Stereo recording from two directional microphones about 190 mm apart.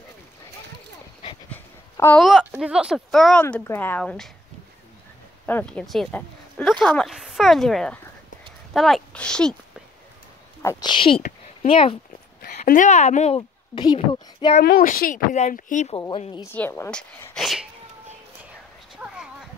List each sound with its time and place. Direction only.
1.5 s dog: 10° left (ahead or behind)
2.6 s speech: 5° right (ahead or behind)
5.5 s speech: 10° left (ahead or behind)
8.7 s a sound: centre (ahead or behind)
10.6 s a woman's voice: 20° left (ahead or behind)
11.2 s a sound: 30° left (ahead or behind)
12.4 s a woman's voice: 45° left (ahead or behind); by 14.6 s 30° left (ahead or behind)
14.6 s speech: 50° left (ahead or behind)
16.1 s a woman's voice: 25° left (ahead or behind)
16.4 s speech: 10° left (ahead or behind)